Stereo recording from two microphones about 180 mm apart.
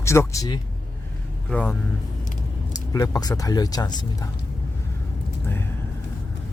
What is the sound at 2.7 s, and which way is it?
Speech, 20° left (ahead or behind).